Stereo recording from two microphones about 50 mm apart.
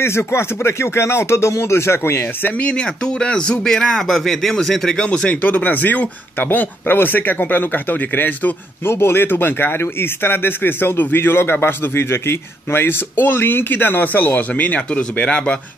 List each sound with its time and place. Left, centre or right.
0.0 s speech: left
2.6 s speech: left
4.9 s speech: left
8.8 s speech: left